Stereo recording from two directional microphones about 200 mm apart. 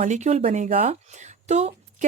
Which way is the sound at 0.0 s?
35° right (ahead or behind).